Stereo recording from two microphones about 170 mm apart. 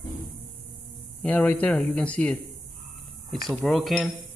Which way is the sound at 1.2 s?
10° left (ahead or behind).